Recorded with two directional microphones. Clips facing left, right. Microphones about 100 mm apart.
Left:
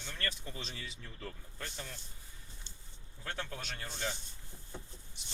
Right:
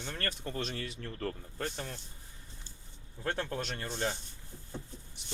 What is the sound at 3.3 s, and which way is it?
Speech, 40° right (ahead or behind).